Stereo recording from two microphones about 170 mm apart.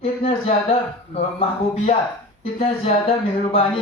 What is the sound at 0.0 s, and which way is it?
A man's voice, 35° left (ahead or behind).